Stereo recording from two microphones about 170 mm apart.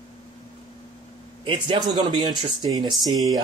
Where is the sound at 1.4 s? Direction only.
30° right (ahead or behind).